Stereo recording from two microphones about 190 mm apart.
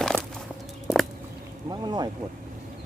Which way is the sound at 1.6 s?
20° right (ahead or behind).